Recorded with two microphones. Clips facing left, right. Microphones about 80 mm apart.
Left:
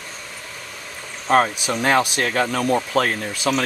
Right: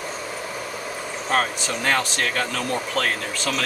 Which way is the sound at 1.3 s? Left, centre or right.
Centre.